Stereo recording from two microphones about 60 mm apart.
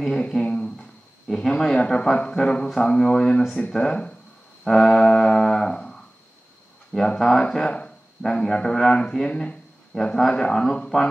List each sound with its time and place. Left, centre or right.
0.0 s a sound: centre
1.2 s speech: centre
4.6 s music: centre
7.2 s speech: centre